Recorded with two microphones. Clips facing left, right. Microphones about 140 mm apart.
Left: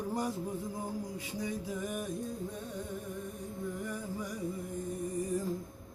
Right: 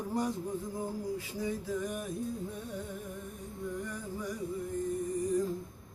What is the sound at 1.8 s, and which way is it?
Music, 5° left (ahead or behind).